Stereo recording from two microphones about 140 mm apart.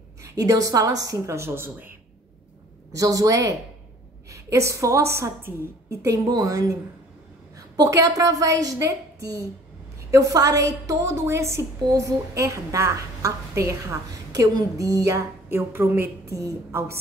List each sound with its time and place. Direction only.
0.2 s a woman's voice: 25° right (ahead or behind)
3.0 s a woman's voice: 25° right (ahead or behind)
9.9 s a woman's voice: 25° right (ahead or behind)